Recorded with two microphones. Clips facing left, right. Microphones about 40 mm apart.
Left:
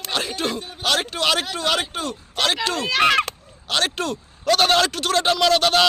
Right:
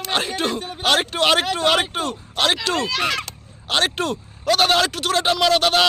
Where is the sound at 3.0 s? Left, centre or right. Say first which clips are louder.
Left 6 dB; left.